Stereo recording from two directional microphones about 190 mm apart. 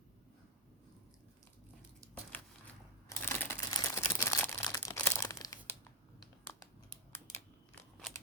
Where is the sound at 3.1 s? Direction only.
10° left (ahead or behind).